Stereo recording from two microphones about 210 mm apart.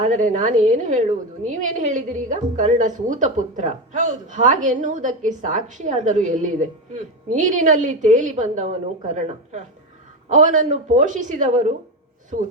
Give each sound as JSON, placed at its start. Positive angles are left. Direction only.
{"t": 0.0, "sound": "a woman's voice", "side_deg": -35}